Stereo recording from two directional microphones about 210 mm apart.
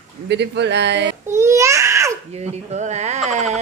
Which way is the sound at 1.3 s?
15° right (ahead or behind).